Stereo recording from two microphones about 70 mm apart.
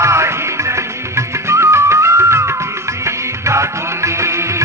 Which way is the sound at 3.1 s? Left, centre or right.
Right.